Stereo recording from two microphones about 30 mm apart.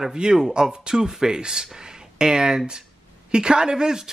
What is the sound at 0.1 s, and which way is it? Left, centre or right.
Speech, right.